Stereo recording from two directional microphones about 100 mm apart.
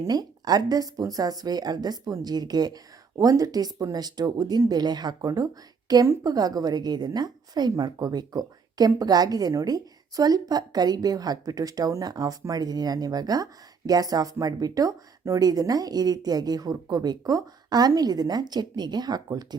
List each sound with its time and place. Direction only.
0.0 s a woman's voice: 40° right (ahead or behind)